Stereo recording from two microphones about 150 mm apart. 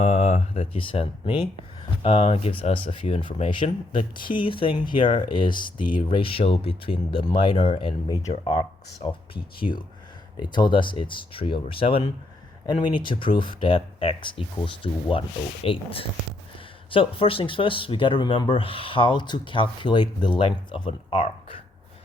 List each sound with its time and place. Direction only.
0.0 s speech: 45° left (ahead or behind)